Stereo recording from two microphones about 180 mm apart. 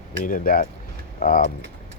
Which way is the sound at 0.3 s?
50° left (ahead or behind).